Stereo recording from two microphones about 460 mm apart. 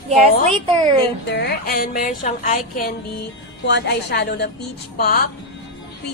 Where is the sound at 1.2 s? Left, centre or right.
Centre.